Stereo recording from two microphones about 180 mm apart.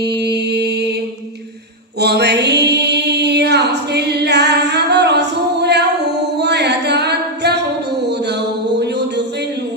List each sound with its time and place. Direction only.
0.0 s mantra: 65° right (ahead or behind)
2.0 s music: 65° right (ahead or behind)
6.4 s a capella: 70° right (ahead or behind)
8.8 s music: 70° right (ahead or behind)